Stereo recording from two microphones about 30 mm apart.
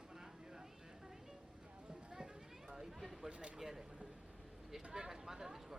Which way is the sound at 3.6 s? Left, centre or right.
Centre.